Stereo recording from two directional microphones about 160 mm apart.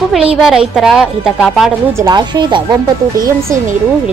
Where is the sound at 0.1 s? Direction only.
5° right (ahead or behind).